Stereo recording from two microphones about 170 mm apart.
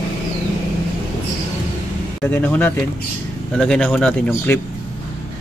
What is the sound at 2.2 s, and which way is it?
Speech, 10° left (ahead or behind).